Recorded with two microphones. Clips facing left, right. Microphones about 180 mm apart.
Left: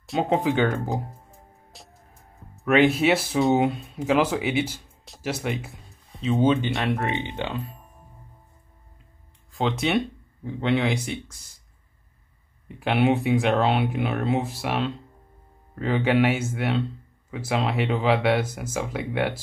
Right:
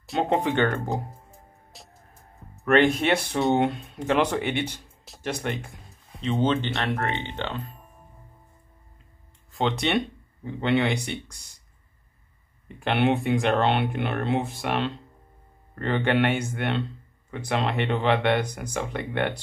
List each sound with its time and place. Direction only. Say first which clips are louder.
0.0 s speech: left 1 dB; centre (ahead or behind)
1.7 s music: even; centre (ahead or behind)
2.5 s speech: left 1 dB; 5° left (ahead or behind)
9.5 s speech: left 1 dB; centre (ahead or behind)
12.6 s speech: left 2 dB; 5° left (ahead or behind)